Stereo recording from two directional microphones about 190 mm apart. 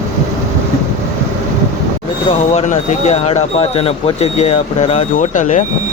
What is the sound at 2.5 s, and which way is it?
Speech, 40° left (ahead or behind).